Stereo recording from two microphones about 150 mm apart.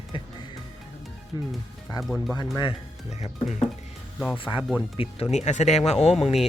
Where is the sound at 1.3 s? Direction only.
30° left (ahead or behind).